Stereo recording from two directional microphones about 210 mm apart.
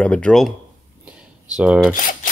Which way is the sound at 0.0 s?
5° left (ahead or behind).